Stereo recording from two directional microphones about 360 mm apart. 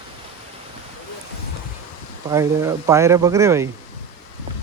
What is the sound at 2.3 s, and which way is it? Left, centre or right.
Speech, centre.